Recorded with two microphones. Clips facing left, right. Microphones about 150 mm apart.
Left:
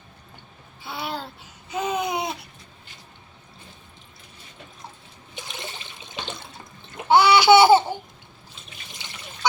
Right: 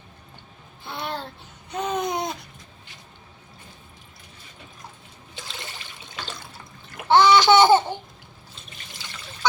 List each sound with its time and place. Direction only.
0.8 s babbling: 5° left (ahead or behind)
1.7 s a sound: 5° left (ahead or behind)
5.3 s water: 20° left (ahead or behind)
7.1 s laughter: 10° left (ahead or behind)
9.0 s trickle: 20° left (ahead or behind)